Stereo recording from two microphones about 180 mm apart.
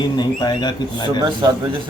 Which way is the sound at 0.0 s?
25° left (ahead or behind).